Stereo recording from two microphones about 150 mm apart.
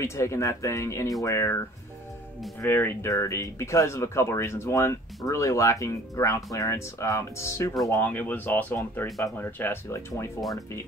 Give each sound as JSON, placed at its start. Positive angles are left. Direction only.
{"t": 0.0, "sound": "speech", "side_deg": 20}
{"t": 2.6, "sound": "speech", "side_deg": 15}